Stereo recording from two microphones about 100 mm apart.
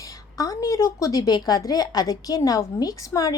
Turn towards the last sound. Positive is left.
turn(degrees=35)  # may be behind; listen again after turning